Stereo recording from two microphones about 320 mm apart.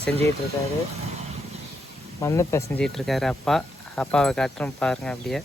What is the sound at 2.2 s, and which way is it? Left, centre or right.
Speech, centre.